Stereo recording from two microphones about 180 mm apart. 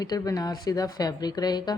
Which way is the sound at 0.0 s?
20° left (ahead or behind).